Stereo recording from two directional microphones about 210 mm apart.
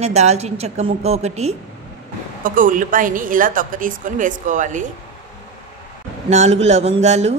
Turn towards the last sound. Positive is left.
turn(degrees=-30)  # may be behind; listen again after turning